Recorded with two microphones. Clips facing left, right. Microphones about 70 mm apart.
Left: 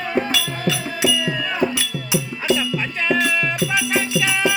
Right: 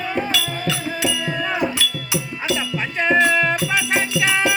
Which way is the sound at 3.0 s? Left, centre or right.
Right.